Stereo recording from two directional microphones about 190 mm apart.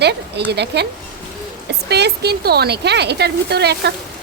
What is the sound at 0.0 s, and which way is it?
Speech, 60° right (ahead or behind).